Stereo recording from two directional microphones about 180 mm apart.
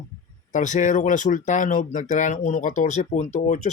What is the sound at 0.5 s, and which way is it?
Speech, 45° left (ahead or behind).